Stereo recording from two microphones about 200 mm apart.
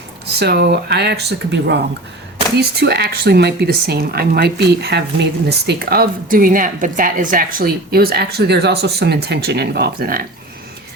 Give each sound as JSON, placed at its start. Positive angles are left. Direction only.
{"t": 0.3, "sound": "speech", "side_deg": -55}